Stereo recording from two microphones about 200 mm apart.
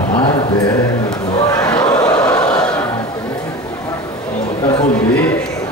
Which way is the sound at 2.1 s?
5° left (ahead or behind).